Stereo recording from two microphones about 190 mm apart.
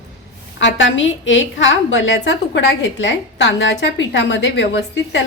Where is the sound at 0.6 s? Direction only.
75° left (ahead or behind).